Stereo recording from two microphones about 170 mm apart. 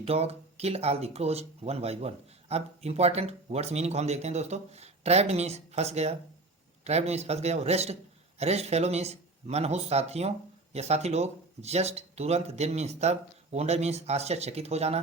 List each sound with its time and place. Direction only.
0.0 s speech: 35° right (ahead or behind)